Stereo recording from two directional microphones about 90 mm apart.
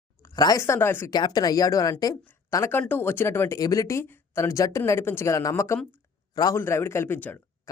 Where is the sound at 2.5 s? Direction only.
25° left (ahead or behind).